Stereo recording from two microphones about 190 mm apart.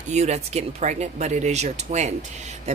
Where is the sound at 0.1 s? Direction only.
35° right (ahead or behind).